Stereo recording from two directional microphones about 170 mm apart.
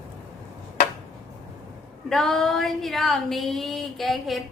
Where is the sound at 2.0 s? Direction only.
Centre (ahead or behind).